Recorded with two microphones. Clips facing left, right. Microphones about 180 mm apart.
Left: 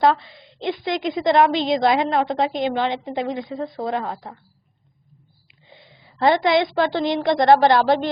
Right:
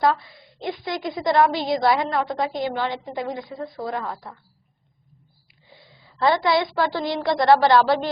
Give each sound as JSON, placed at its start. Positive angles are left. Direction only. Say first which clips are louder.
{"t": 0.0, "sound": "a woman's voice", "louder": "left 3 dB", "side_deg": 20}
{"t": 5.5, "sound": "a woman's voice", "louder": "left 2 dB", "side_deg": 20}